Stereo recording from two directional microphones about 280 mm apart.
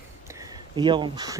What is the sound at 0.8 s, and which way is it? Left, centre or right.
Speech, centre.